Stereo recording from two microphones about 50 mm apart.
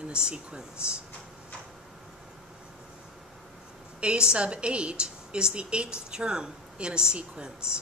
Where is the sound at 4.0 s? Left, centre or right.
Centre.